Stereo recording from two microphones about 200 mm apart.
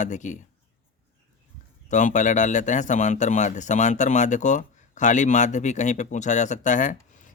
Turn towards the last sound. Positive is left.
turn(degrees=40)  # may be behind; listen again after turning